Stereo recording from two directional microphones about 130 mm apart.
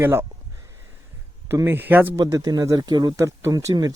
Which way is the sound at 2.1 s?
25° right (ahead or behind).